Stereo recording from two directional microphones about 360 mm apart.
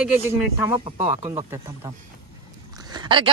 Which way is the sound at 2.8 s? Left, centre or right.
Centre.